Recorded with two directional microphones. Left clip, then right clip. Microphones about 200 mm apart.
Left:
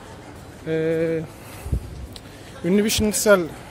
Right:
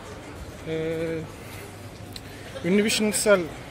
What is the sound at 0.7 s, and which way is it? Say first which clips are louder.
Speech: left 6 dB; 45° left (ahead or behind).